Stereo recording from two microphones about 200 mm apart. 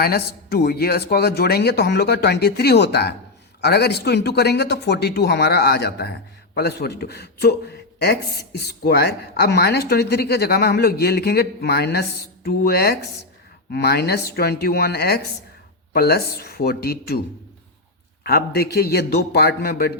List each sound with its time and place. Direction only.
0.0 s speech: 50° left (ahead or behind)
18.3 s speech: 50° left (ahead or behind)